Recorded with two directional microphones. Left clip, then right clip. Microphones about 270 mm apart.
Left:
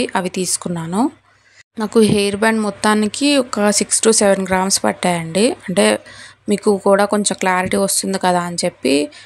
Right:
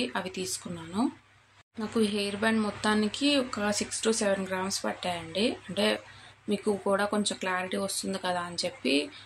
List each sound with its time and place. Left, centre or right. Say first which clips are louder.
0.0 s speech: left 13 dB; left